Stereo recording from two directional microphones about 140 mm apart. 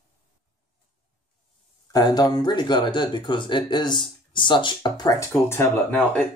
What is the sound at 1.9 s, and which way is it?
Speech, 30° left (ahead or behind).